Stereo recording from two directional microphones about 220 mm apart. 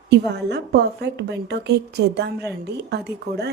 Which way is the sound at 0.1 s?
50° right (ahead or behind).